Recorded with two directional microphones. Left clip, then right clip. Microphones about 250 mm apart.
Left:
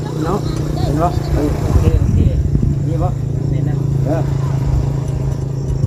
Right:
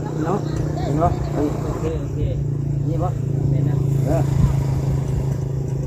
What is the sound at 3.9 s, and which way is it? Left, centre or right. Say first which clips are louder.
Vehicle: left 3 dB; right.